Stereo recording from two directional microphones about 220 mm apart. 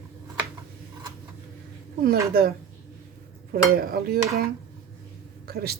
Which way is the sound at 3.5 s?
40° right (ahead or behind).